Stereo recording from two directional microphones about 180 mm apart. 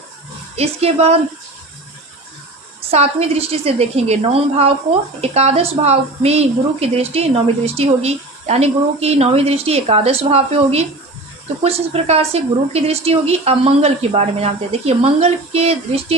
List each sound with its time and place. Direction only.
0.5 s speech: 35° right (ahead or behind)
2.9 s speech: 35° right (ahead or behind)